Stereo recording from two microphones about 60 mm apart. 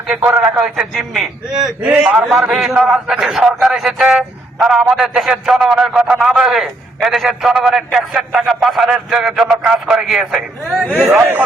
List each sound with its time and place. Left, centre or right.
0.2 s a man's voice: right
0.9 s a man's voice: centre
1.8 s a man's voice: centre
2.3 s a man's voice: centre